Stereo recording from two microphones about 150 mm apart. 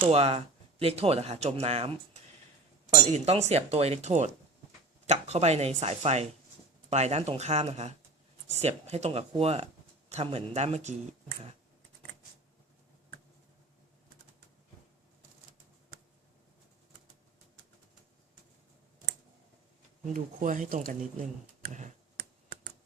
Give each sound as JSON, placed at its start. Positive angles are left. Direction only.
{"t": 0.1, "sound": "speech", "side_deg": -45}
{"t": 20.1, "sound": "speech", "side_deg": -60}
{"t": 21.7, "sound": "speech", "side_deg": -55}